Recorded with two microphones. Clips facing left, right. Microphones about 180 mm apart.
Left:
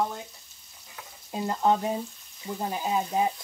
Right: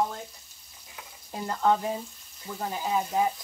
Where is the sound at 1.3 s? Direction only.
20° left (ahead or behind).